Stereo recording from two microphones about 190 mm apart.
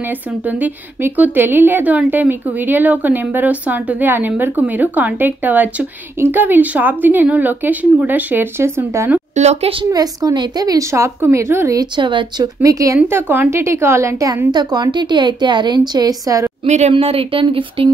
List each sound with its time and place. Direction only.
0.5 s a woman's voice: 10° right (ahead or behind)
9.3 s a woman's voice: 35° right (ahead or behind)
9.8 s a woman's voice: 20° right (ahead or behind)
16.6 s a woman's voice: 35° right (ahead or behind)